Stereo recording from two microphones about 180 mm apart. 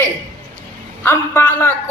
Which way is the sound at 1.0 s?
10° left (ahead or behind).